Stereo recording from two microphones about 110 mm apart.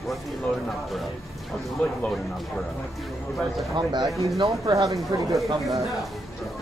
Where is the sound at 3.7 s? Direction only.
40° right (ahead or behind).